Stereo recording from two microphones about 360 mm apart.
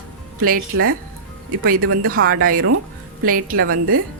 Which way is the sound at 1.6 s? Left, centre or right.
Right.